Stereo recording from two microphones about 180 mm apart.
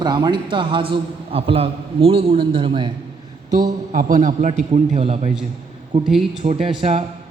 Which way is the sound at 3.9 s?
45° right (ahead or behind).